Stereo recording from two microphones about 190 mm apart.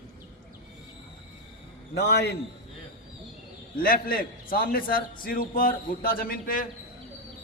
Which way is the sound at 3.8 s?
50° left (ahead or behind).